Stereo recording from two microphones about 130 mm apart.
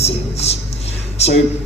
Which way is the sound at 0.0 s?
55° left (ahead or behind).